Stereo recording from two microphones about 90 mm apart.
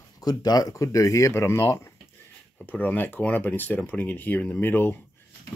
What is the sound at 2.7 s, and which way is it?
Speech, 20° left (ahead or behind).